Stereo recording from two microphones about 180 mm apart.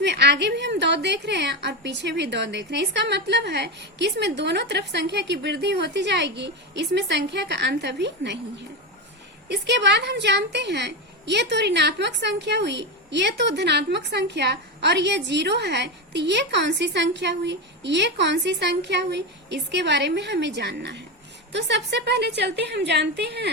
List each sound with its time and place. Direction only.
0.0 s a woman's voice: 70° right (ahead or behind)
9.5 s a woman's voice: 70° right (ahead or behind)